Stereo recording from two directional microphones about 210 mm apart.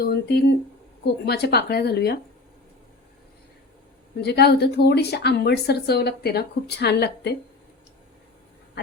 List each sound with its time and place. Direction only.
0.0 s a woman's voice: 50° left (ahead or behind)
4.2 s a woman's voice: 50° left (ahead or behind)